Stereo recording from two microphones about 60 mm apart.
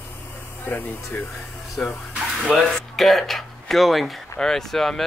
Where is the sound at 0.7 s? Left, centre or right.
Left.